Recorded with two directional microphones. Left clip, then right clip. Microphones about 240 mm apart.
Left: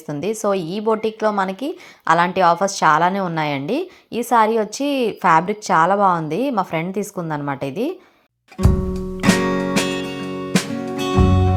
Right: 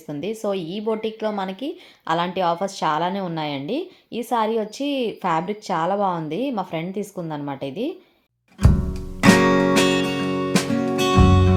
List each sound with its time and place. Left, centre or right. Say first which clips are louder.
0.1 s a woman's voice: left 5 dB; centre
8.5 s music: left 4 dB; centre